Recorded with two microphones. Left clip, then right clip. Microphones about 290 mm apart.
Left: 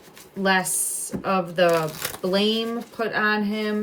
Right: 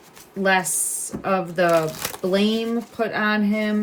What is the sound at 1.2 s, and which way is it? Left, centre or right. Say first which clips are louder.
A woman's voice: even; centre.